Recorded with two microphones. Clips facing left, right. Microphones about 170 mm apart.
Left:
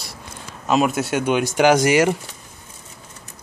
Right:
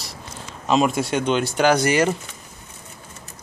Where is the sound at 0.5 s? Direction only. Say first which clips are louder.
Even; 5° left (ahead or behind).